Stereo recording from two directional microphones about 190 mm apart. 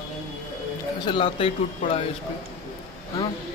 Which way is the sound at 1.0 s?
25° left (ahead or behind).